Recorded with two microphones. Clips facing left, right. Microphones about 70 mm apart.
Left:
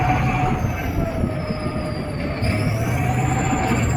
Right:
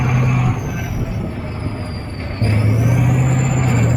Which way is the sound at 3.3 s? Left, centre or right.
Left.